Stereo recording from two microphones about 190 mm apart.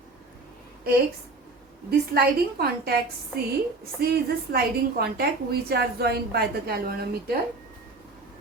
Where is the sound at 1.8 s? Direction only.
55° right (ahead or behind).